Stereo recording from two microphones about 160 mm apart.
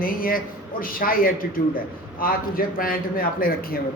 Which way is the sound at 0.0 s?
60° left (ahead or behind).